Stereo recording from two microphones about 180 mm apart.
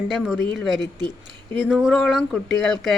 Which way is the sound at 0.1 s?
Centre (ahead or behind).